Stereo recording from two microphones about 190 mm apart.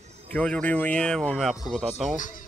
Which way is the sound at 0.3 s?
5° left (ahead or behind).